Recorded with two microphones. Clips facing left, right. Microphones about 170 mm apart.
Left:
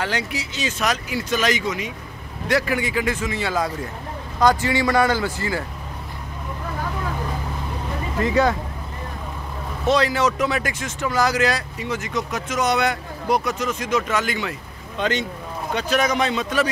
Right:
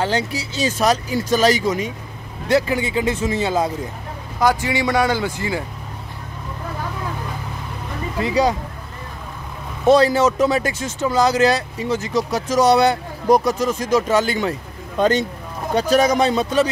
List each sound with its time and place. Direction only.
0.0 s a man's voice: 30° right (ahead or behind)
4.4 s a man's voice: 10° right (ahead or behind)
8.2 s a man's voice: 10° right (ahead or behind)
9.9 s speech: 30° right (ahead or behind)